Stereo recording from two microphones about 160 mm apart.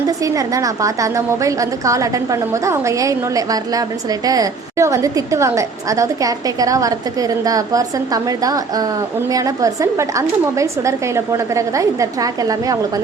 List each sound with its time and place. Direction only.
0.2 s a woman's voice: 20° right (ahead or behind)